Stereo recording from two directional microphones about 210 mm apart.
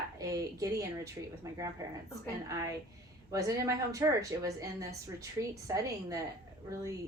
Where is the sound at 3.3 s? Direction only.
15° right (ahead or behind).